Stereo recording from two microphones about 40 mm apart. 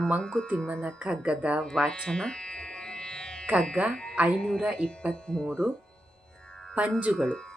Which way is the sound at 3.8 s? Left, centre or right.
Right.